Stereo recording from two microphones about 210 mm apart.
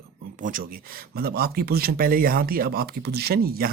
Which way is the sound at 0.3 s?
40° right (ahead or behind).